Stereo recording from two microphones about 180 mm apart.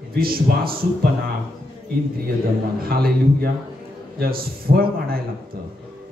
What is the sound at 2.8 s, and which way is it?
A man's voice, 55° right (ahead or behind).